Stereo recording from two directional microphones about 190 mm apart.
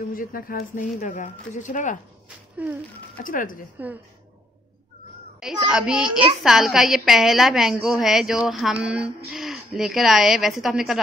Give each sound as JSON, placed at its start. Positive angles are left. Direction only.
{"t": 0.1, "sound": "speech", "side_deg": 45}
{"t": 2.6, "sound": "speech", "side_deg": -10}
{"t": 3.3, "sound": "speech", "side_deg": 45}
{"t": 5.4, "sound": "a woman's voice", "side_deg": -5}